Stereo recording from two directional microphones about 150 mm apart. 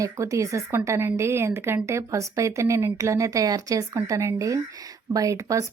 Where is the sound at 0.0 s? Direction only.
20° right (ahead or behind).